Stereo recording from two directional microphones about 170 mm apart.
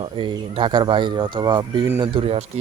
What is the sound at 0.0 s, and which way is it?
Speech, 30° right (ahead or behind).